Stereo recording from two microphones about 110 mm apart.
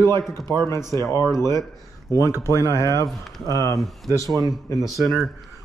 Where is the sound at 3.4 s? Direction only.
30° right (ahead or behind).